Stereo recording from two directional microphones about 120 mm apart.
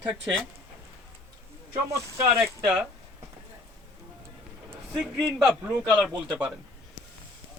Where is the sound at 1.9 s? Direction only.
25° right (ahead or behind).